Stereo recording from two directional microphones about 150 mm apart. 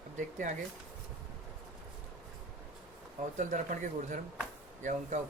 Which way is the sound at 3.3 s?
60° right (ahead or behind).